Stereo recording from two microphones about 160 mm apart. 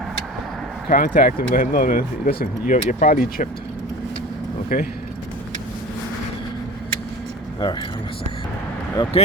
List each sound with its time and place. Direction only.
0.9 s speech: 60° left (ahead or behind)
4.7 s speech: 60° left (ahead or behind)
7.6 s speech: 30° left (ahead or behind)
9.1 s speech: 35° left (ahead or behind)